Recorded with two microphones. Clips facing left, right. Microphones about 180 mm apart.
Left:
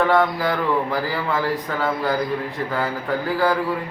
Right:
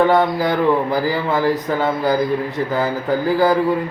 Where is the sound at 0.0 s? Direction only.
40° right (ahead or behind).